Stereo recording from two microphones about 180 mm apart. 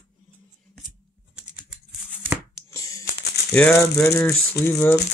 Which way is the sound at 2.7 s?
20° left (ahead or behind).